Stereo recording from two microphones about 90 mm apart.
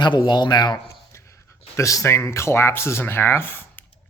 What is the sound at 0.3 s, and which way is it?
Speech, 50° left (ahead or behind).